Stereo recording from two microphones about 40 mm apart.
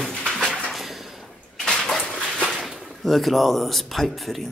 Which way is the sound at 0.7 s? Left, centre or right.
Centre.